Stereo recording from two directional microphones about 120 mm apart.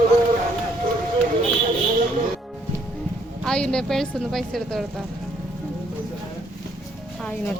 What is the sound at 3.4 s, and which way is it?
A woman's voice, 5° left (ahead or behind).